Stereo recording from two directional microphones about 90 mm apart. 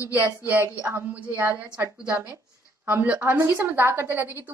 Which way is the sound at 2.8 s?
20° right (ahead or behind).